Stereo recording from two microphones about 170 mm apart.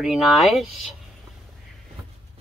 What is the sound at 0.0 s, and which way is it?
Speech, centre (ahead or behind).